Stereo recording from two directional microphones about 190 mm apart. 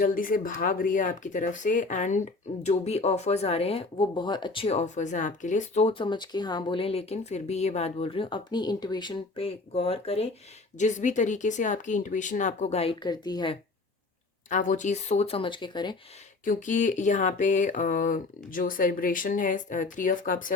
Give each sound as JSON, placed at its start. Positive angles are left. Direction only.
{"t": 0.0, "sound": "speech", "side_deg": 45}
{"t": 14.5, "sound": "speech", "side_deg": 40}
{"t": 16.4, "sound": "speech", "side_deg": 45}